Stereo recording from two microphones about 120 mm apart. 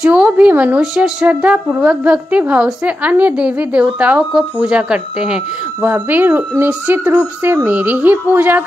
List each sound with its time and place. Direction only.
0.0 s a woman's voice: 10° right (ahead or behind)